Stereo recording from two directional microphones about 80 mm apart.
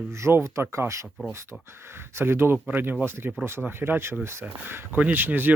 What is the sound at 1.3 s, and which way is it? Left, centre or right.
Speech, right.